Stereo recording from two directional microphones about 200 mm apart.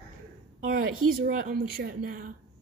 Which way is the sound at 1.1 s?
45° right (ahead or behind).